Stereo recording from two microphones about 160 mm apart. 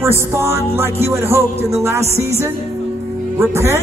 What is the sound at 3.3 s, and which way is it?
Speech, 20° right (ahead or behind).